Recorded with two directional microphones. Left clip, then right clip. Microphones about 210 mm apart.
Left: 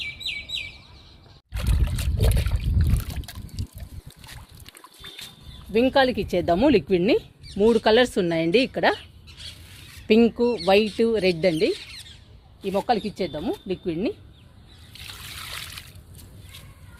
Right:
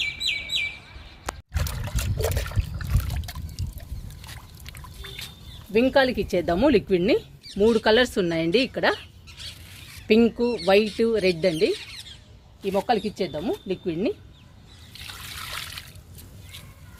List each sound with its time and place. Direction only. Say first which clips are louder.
1.5 s trickle: right 1 dB; centre (ahead or behind)
5.7 s speech: even; 25° left (ahead or behind)
10.1 s speech: left 1 dB; 25° left (ahead or behind)
12.6 s speech: even; 40° left (ahead or behind)
13.7 s speech: even; 25° left (ahead or behind)
15.0 s trickle: right 1 dB; centre (ahead or behind)